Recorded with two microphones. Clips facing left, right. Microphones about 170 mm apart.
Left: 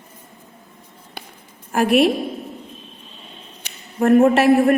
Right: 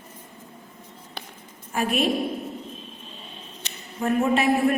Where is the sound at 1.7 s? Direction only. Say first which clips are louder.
Left 8 dB; 80° left.